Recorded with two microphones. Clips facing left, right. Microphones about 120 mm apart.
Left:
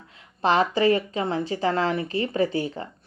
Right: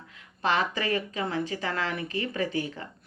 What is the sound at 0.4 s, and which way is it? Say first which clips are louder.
Speech: left 7 dB; 30° left (ahead or behind).